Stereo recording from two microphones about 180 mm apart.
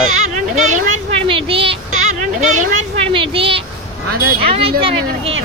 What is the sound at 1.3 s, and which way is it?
Speech, 30° right (ahead or behind).